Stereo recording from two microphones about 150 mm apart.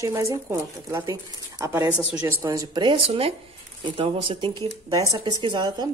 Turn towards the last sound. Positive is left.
turn(degrees=-30)  # may be behind; listen again after turning